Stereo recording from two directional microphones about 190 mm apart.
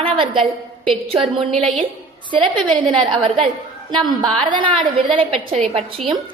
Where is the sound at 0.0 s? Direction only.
25° right (ahead or behind).